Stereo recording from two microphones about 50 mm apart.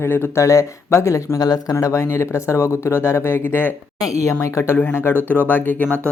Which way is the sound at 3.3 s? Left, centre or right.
Left.